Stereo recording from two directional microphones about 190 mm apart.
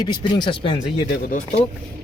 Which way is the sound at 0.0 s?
25° left (ahead or behind).